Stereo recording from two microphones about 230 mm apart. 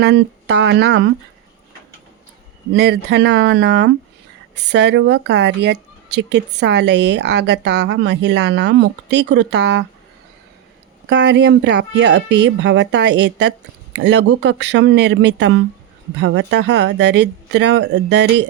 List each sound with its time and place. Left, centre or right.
0.0 s speech: right
2.7 s speech: right
11.1 s speech: right